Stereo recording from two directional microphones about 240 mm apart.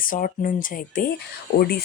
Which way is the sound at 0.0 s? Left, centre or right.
Left.